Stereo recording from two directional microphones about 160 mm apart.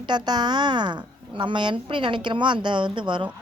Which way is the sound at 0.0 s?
25° right (ahead or behind).